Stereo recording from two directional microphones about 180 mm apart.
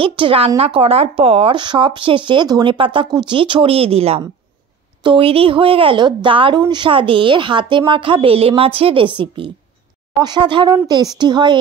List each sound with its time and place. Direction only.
0.0 s speech: 30° right (ahead or behind)